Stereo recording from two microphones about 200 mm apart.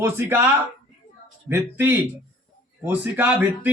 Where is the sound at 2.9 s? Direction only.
10° right (ahead or behind).